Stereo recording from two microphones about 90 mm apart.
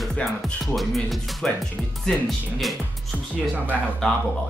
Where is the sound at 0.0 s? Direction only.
Centre (ahead or behind).